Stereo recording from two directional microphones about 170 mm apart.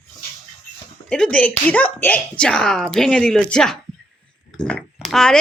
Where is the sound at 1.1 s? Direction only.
5° left (ahead or behind).